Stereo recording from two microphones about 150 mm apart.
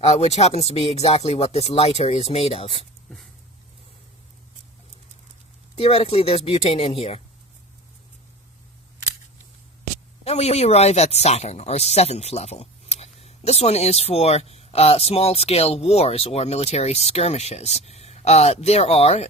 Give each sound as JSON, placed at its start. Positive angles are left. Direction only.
{"t": 0.1, "sound": "speech", "side_deg": 45}
{"t": 5.7, "sound": "speech", "side_deg": 40}
{"t": 10.2, "sound": "speech", "side_deg": 45}